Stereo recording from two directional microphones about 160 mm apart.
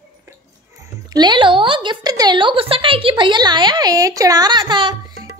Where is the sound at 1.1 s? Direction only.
25° right (ahead or behind).